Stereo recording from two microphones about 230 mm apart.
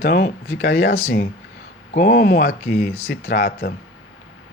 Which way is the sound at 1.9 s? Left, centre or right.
Left.